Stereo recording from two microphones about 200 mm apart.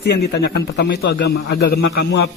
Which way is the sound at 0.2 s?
55° left (ahead or behind).